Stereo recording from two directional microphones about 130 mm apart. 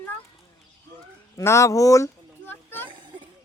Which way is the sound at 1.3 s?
20° left (ahead or behind).